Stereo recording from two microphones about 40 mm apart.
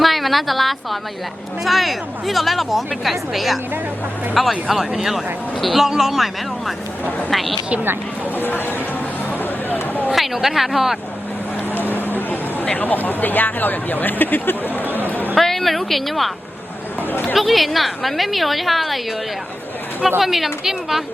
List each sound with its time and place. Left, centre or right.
0.0 s a woman's voice: centre
4.9 s speech: centre
5.1 s speech: centre
8.4 s speech: left
10.2 s speech: centre
11.7 s a sound: left
12.8 s speech: left
14.8 s speech: right
15.4 s speech: centre
17.1 s speech: left
17.3 s speech: centre
20.1 s speech: centre